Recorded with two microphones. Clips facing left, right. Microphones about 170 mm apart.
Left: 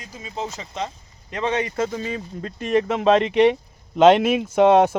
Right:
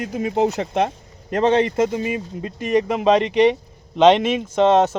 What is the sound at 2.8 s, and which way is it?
Speech, centre (ahead or behind).